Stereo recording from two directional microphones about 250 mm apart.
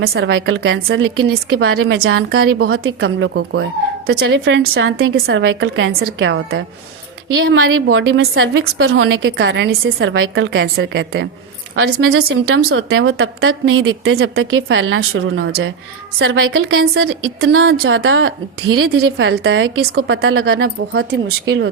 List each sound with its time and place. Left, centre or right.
0.0 s a woman's voice: right
11.7 s a woman's voice: right
20.6 s a woman's voice: right